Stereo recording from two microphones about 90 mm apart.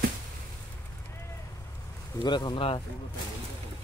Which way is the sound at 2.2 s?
55° left (ahead or behind).